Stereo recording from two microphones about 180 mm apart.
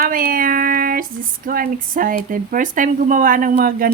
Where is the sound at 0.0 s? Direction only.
50° right (ahead or behind).